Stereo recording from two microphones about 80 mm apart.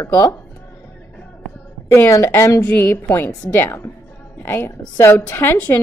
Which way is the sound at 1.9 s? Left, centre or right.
Left.